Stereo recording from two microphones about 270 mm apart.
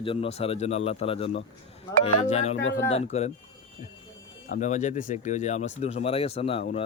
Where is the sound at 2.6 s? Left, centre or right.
Left.